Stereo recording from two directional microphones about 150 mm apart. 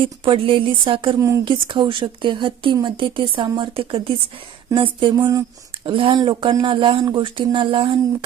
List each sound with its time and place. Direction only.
0.0 s speech: 35° right (ahead or behind)
1.2 s speech: 20° right (ahead or behind)
1.6 s speech: 35° right (ahead or behind)
5.8 s speech: 35° right (ahead or behind)